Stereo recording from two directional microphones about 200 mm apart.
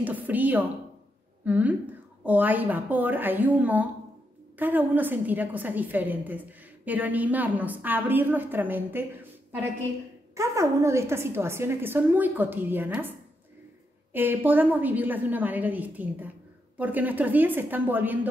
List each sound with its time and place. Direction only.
0.0 s a woman's voice: 10° right (ahead or behind)
14.1 s a woman's voice: 10° right (ahead or behind)